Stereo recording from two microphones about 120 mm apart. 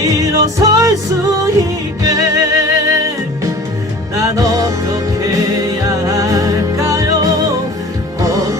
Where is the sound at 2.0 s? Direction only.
30° right (ahead or behind).